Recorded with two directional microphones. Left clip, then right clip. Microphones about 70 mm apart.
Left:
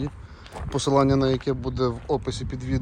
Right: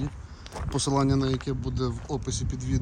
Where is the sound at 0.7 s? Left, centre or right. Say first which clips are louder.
Left 6 dB; right.